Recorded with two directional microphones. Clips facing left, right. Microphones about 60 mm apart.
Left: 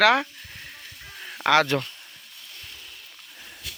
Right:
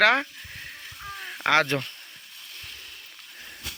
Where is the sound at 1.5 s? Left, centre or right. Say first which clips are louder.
Left 2 dB; right.